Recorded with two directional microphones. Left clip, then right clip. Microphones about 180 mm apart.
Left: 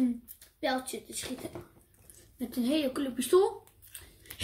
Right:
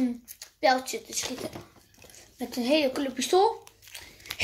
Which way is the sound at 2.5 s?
15° left (ahead or behind).